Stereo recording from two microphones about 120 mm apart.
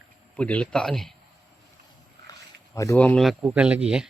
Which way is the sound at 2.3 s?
25° left (ahead or behind).